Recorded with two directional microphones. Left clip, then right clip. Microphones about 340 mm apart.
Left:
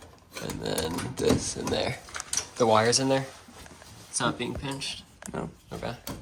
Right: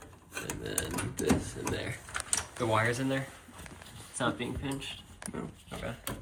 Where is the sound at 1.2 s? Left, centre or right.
Centre.